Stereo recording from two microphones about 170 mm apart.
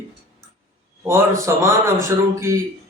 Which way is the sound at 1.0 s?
15° right (ahead or behind).